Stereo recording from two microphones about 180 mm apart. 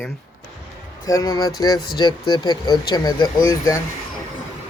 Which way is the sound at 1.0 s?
20° left (ahead or behind).